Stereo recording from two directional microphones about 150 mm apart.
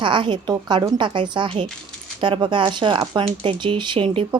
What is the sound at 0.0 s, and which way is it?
Speech, 35° right (ahead or behind).